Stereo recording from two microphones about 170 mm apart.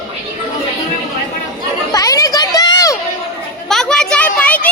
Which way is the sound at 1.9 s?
20° left (ahead or behind).